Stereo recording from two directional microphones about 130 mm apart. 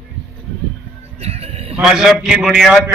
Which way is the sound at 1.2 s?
55° right (ahead or behind).